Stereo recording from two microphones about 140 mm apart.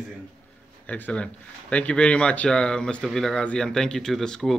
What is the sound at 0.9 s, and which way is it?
Speech, 10° left (ahead or behind).